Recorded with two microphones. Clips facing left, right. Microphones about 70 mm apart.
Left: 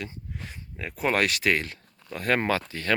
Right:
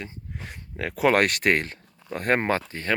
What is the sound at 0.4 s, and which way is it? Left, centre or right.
Speech, right.